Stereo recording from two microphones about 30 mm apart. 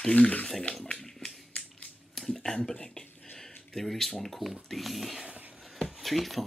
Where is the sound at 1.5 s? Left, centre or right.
Left.